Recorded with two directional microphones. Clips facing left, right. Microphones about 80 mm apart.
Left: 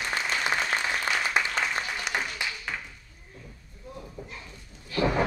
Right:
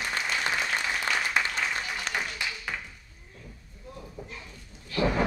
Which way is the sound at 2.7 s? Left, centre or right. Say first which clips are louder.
Even; centre.